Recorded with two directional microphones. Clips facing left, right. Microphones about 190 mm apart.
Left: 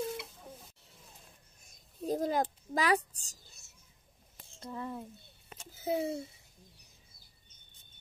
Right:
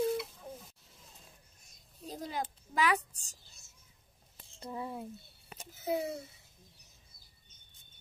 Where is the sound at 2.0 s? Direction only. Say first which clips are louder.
Left 8 dB; 50° left (ahead or behind).